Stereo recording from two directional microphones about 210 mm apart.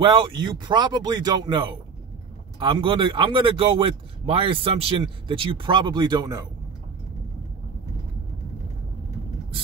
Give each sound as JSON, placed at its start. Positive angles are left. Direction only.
{"t": 0.0, "sound": "a man's voice", "side_deg": -20}